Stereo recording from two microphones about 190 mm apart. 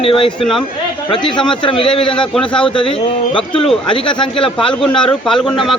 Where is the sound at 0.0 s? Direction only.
30° left (ahead or behind).